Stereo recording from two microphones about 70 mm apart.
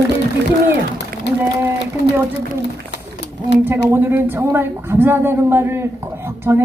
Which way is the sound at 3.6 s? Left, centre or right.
Right.